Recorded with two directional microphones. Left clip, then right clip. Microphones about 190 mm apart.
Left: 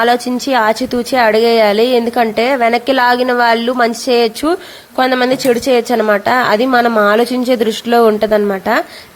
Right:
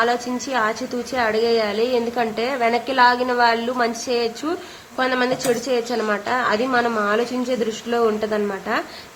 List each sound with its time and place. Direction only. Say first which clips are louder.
0.0 s a woman's voice: left 8 dB; 45° left (ahead or behind)